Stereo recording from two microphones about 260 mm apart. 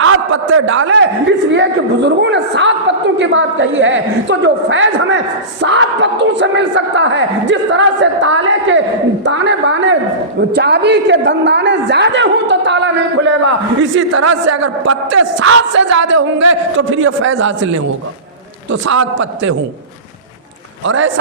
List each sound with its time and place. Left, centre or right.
0.0 s a man's voice: right
13.9 s a woman's voice: right
15.1 s a woman's voice: right
18.9 s a woman's voice: right
20.8 s a woman's voice: right